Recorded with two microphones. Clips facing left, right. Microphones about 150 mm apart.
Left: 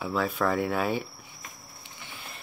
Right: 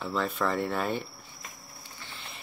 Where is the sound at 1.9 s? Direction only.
15° left (ahead or behind).